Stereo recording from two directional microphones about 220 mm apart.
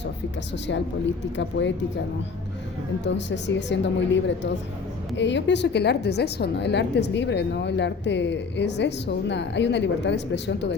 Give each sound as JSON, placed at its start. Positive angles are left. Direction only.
{"t": 1.4, "sound": "a woman's voice", "side_deg": 55}
{"t": 3.0, "sound": "a woman's voice", "side_deg": 55}